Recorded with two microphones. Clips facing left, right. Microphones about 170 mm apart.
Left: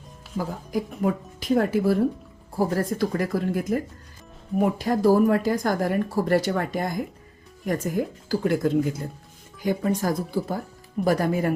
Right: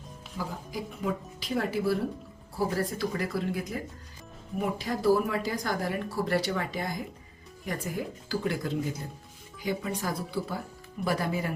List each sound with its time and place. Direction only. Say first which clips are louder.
0.3 s speech: left 8 dB; 50° left (ahead or behind)